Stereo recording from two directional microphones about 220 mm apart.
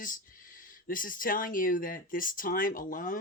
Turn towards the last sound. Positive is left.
turn(degrees=40)  # may be behind; listen again after turning